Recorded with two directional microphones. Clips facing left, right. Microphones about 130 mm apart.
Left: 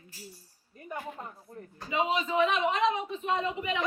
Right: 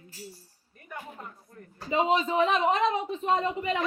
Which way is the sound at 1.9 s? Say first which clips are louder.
Right 4 dB; 35° right (ahead or behind).